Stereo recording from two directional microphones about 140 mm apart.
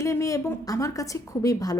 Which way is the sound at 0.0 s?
25° left (ahead or behind).